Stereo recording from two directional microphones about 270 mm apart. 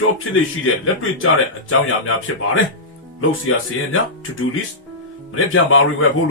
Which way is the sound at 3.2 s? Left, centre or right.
Left.